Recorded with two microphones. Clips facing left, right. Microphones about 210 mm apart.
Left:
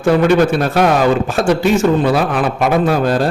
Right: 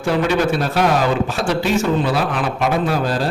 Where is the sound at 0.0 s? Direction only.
55° left (ahead or behind).